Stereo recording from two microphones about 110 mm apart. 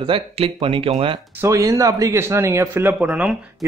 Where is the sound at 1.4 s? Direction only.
30° right (ahead or behind).